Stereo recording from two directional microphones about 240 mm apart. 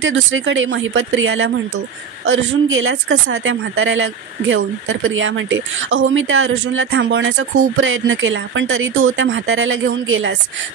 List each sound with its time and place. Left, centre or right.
0.0 s speech: right